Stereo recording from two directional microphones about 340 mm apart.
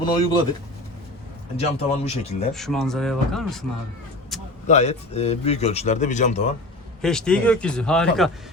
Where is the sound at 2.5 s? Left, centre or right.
Centre.